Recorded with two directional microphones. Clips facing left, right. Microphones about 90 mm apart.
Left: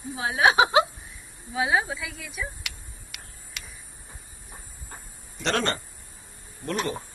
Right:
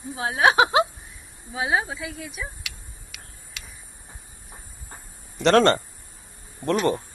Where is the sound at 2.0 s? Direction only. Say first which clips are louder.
Right 3 dB; 35° right (ahead or behind).